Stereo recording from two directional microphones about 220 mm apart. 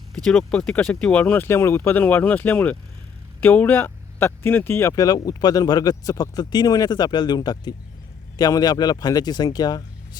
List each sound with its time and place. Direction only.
0.3 s speech: 5° left (ahead or behind)